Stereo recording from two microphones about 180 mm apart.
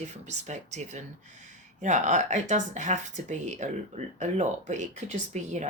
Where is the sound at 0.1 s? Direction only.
40° right (ahead or behind).